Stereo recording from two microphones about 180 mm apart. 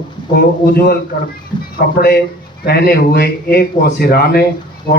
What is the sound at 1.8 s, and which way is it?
A man's voice, 55° left (ahead or behind).